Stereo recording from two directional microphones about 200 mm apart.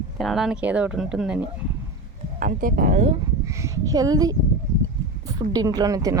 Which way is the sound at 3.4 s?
15° right (ahead or behind).